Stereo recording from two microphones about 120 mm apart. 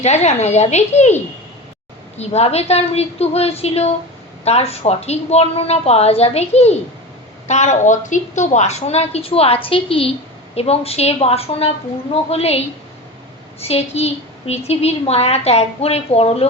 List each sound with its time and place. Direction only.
0.0 s a woman's voice: 70° left (ahead or behind)
7.4 s a woman's voice: 75° left (ahead or behind); by 16.5 s 55° left (ahead or behind)